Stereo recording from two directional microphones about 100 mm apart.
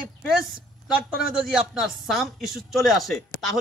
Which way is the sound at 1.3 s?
5° right (ahead or behind).